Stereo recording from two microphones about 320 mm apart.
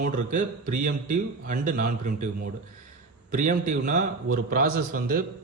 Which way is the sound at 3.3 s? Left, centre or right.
Right.